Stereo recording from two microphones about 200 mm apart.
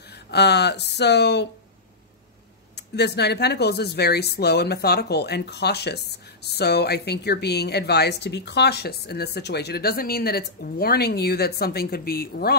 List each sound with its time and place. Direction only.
0.1 s speech: 55° left (ahead or behind)
2.7 s a woman's voice: 55° left (ahead or behind)